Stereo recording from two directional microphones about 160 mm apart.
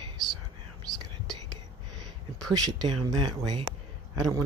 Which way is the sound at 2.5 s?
25° right (ahead or behind).